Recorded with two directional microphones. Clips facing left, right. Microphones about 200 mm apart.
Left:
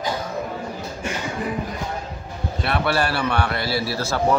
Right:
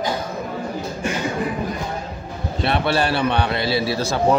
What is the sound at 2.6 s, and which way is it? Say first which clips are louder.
A man's voice: right 2 dB; 25° right (ahead or behind).